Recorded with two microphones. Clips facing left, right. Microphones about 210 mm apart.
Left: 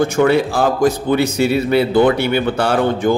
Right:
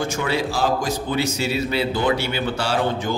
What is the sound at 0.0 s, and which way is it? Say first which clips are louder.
Speech: left 9 dB; 55° left (ahead or behind).